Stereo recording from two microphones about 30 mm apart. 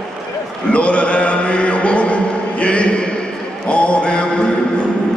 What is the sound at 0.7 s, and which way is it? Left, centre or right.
Chant, left.